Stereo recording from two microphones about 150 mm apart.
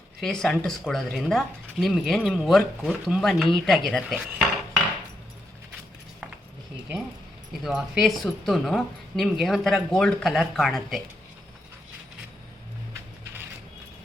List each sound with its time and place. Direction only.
0.2 s speech: 5° left (ahead or behind)
7.6 s speech: 5° right (ahead or behind)